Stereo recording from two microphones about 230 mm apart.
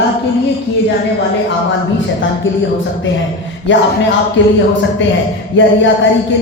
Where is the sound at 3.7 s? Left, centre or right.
Left.